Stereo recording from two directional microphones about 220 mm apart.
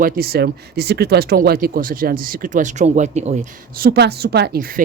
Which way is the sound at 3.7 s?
45° right (ahead or behind).